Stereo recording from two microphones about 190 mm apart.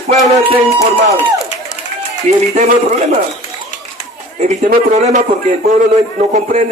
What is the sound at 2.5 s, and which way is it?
Speech, 40° right (ahead or behind).